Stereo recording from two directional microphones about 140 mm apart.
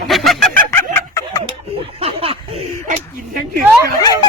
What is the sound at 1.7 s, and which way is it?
Speech, 40° right (ahead or behind).